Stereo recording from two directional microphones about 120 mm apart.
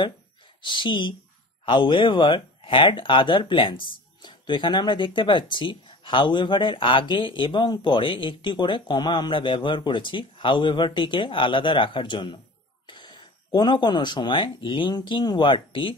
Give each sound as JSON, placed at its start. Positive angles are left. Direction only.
{"t": 0.6, "sound": "speech", "side_deg": 40}